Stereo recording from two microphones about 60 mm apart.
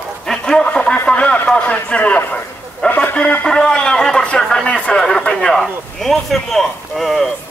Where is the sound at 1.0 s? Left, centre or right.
Centre.